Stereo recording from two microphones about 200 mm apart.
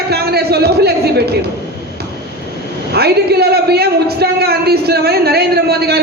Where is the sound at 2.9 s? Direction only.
55° right (ahead or behind).